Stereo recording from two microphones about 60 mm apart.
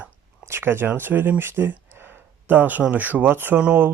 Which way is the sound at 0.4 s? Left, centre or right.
Right.